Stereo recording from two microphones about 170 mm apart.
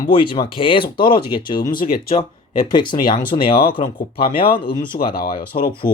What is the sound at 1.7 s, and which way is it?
Speech, 60° left (ahead or behind).